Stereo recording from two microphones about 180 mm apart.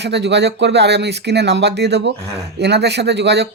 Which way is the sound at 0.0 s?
75° right (ahead or behind).